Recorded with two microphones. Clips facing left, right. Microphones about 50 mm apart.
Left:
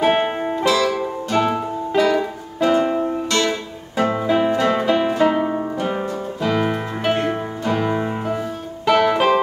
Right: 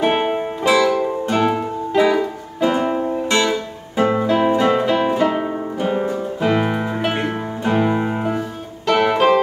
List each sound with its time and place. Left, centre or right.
0.0 s music: centre
0.7 s music: centre
4.2 s music: centre
4.5 s music: centre
4.7 s music: centre
6.0 s music: centre
6.7 s music: centre